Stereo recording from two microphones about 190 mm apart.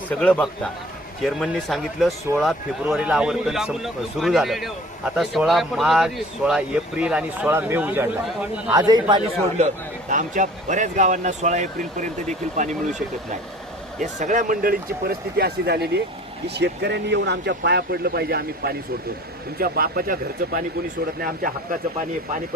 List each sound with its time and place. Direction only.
0.2 s speech: 5° left (ahead or behind); by 8.8 s 10° right (ahead or behind)
8.9 s a man's voice: 25° right (ahead or behind)
10.1 s speech: 40° right (ahead or behind)
14.0 s speech: 40° right (ahead or behind)